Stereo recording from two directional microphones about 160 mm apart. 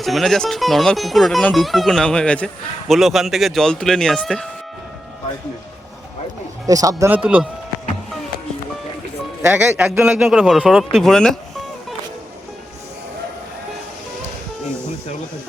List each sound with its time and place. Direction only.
0.0 s speech: centre (ahead or behind)
6.7 s a man's voice: 20° right (ahead or behind)
7.1 s a man's voice: 10° right (ahead or behind)
9.5 s a man's voice: 10° right (ahead or behind)
10.9 s music: centre (ahead or behind)